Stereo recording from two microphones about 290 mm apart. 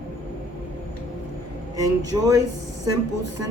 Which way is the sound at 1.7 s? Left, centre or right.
Centre.